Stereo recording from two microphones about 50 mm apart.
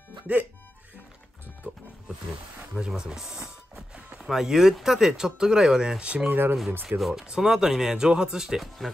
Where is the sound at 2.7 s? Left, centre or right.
Centre.